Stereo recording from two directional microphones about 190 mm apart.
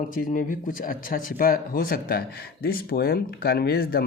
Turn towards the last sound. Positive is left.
turn(degrees=55)  # may be behind; listen again after turning